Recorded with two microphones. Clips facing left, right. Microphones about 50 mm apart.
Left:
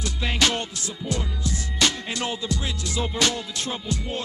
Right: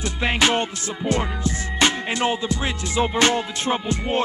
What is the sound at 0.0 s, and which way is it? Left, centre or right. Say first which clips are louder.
Music: right 4 dB; right.